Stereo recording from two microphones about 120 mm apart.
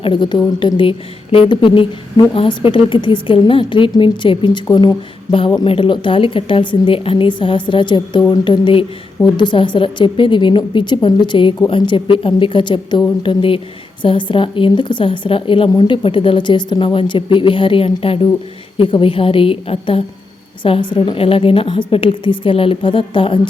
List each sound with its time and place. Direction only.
0.0 s a woman's voice: 40° left (ahead or behind)